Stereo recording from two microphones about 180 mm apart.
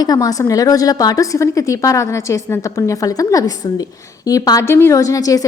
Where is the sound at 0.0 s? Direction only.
20° left (ahead or behind).